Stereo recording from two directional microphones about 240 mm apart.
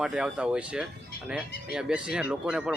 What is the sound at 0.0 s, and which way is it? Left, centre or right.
Speech, centre.